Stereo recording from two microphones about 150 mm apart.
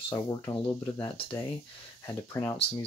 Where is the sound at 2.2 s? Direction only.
15° left (ahead or behind).